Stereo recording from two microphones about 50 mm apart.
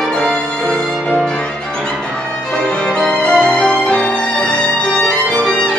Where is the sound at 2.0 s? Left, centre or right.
Centre.